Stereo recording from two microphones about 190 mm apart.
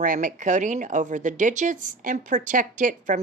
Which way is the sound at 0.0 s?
45° right (ahead or behind).